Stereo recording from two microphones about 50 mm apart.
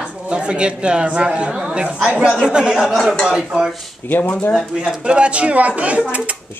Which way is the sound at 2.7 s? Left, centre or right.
Centre.